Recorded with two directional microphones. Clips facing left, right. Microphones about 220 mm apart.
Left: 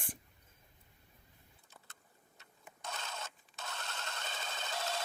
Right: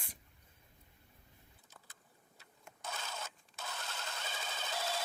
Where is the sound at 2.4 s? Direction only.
5° right (ahead or behind).